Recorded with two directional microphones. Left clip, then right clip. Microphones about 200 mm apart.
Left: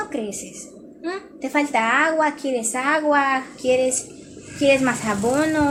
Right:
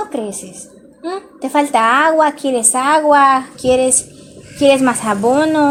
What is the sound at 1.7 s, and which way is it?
A woman's voice, 40° right (ahead or behind).